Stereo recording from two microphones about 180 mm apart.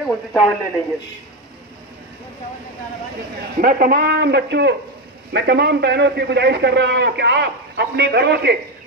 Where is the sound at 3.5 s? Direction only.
55° right (ahead or behind).